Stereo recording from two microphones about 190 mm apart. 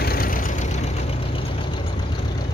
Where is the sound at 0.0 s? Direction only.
50° left (ahead or behind).